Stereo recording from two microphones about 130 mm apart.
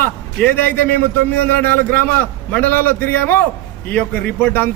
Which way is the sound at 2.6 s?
15° left (ahead or behind).